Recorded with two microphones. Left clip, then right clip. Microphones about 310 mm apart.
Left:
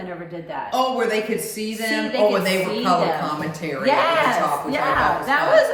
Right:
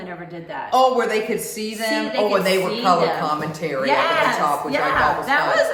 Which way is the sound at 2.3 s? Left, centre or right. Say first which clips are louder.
Right 2 dB; centre.